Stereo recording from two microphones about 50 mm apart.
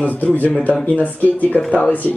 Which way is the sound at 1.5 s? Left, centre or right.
Centre.